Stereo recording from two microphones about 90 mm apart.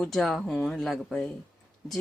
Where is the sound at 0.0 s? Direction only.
5° left (ahead or behind).